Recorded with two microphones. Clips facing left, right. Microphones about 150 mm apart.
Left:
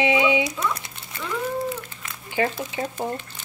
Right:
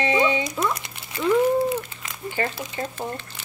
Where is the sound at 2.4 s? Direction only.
10° left (ahead or behind).